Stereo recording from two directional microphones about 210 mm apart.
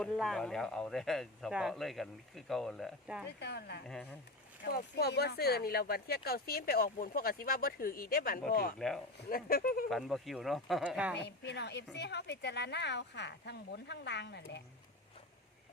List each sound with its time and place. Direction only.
0.0 s speech: centre (ahead or behind)
3.2 s speech: 50° left (ahead or behind)
9.9 s speech: centre (ahead or behind)
11.2 s speech: 55° left (ahead or behind)